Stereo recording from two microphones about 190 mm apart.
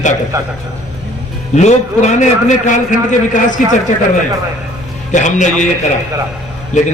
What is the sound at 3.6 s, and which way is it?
Speech, 40° left (ahead or behind).